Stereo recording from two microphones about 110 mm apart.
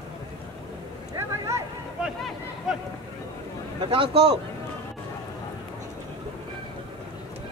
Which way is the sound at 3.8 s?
50° right (ahead or behind).